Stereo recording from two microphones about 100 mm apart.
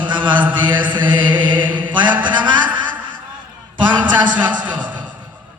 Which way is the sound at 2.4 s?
50° right (ahead or behind).